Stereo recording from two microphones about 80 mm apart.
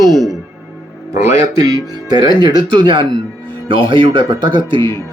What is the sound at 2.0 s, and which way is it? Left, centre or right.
Speech, right.